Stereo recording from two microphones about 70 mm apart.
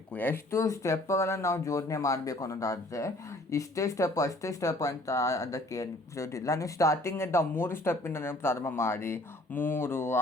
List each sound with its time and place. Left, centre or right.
0.1 s speech: left
0.5 s speech: left